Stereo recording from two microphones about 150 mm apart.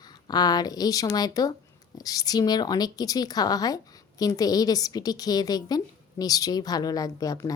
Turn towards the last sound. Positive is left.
turn(degrees=25)  # may be behind; listen again after turning